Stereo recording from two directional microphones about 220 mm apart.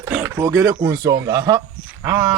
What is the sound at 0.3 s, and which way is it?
Speech, 15° right (ahead or behind).